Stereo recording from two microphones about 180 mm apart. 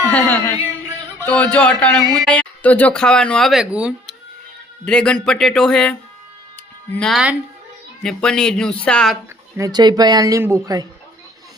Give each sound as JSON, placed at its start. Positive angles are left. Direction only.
{"t": 0.1, "sound": "a man's voice", "side_deg": 10}
{"t": 4.9, "sound": "speech", "side_deg": 5}
{"t": 9.6, "sound": "speech", "side_deg": -20}